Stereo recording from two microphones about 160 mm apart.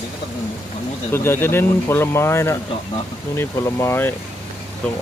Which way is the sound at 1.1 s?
15° left (ahead or behind).